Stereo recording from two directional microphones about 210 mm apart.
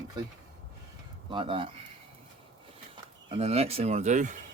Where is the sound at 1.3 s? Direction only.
25° right (ahead or behind).